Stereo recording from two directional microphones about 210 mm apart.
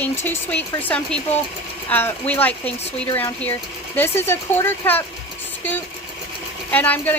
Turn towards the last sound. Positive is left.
turn(degrees=10)  # may be behind; listen again after turning